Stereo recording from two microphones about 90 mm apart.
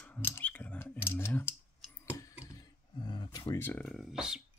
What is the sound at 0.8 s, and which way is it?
Speech, 25° left (ahead or behind).